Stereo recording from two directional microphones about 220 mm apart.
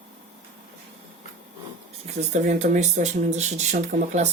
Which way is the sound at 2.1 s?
30° right (ahead or behind).